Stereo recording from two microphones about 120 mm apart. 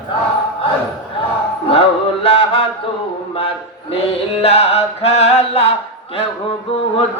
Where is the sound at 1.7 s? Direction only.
55° left (ahead or behind).